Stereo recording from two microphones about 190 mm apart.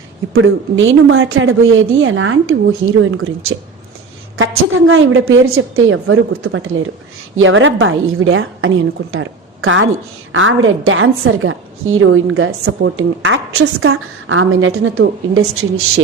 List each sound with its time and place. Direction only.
0.3 s a woman's voice: 85° right
4.4 s a woman's voice: 90° right